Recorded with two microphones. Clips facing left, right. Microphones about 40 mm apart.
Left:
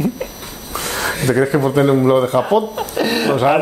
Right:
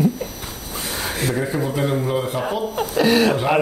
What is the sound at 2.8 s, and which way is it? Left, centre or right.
Speech, centre.